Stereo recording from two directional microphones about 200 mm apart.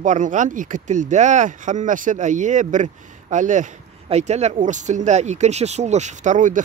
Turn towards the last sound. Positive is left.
turn(degrees=-40)  # may be behind; listen again after turning